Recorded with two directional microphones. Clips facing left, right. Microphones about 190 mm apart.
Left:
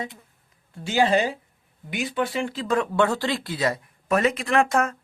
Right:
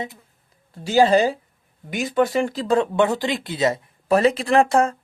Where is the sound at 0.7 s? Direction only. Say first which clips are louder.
Right 5 dB; 35° right (ahead or behind).